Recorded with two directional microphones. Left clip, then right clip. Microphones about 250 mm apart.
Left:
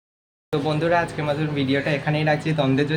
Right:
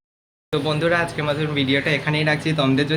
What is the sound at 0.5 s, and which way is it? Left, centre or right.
Speech, centre.